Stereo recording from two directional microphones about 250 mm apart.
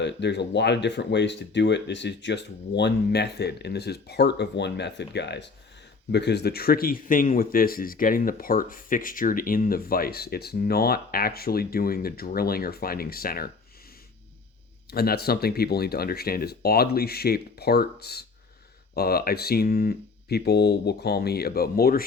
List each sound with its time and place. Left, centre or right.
0.0 s speech: left
14.8 s speech: left